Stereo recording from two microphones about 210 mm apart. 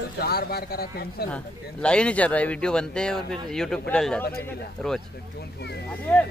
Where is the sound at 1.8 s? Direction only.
5° left (ahead or behind).